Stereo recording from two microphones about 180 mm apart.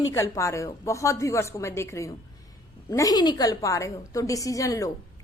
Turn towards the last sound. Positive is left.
turn(degrees=20)  # may be behind; listen again after turning